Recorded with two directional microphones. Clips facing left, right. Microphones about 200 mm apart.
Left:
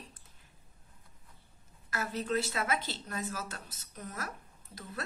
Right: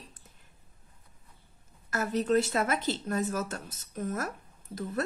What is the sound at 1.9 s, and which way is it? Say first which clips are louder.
A woman's voice: right 7 dB; 45° right (ahead or behind).